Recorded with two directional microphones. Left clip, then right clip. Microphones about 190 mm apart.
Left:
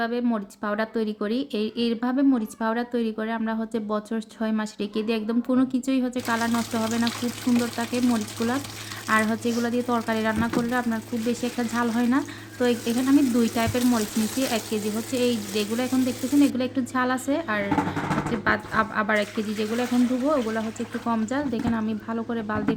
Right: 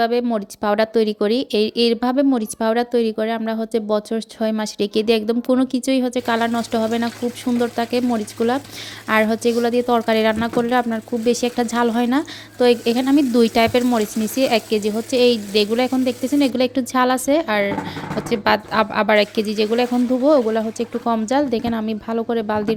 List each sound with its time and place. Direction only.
0.0 s speech: 35° right (ahead or behind)